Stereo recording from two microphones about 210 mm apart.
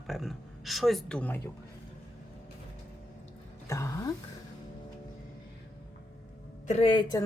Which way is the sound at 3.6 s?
15° left (ahead or behind).